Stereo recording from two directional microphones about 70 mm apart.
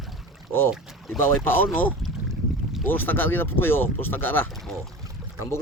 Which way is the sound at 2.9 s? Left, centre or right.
Left.